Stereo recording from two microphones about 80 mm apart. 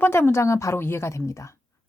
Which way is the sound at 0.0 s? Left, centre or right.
Left.